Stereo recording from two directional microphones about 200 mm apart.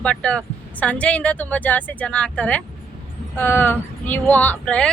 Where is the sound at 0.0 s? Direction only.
5° left (ahead or behind).